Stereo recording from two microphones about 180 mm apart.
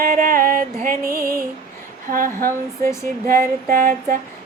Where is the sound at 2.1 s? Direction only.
50° right (ahead or behind).